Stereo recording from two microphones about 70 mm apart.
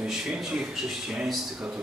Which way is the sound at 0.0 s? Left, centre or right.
Centre.